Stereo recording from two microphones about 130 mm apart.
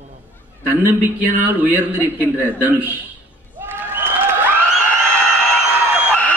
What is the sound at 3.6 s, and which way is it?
Applause, 15° right (ahead or behind).